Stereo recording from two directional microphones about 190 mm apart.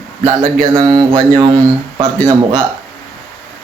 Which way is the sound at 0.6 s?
20° right (ahead or behind).